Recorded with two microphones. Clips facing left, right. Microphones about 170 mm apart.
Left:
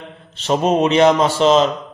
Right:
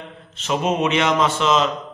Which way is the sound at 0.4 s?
35° left (ahead or behind).